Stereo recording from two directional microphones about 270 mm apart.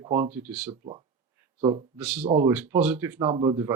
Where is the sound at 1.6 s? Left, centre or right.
Centre.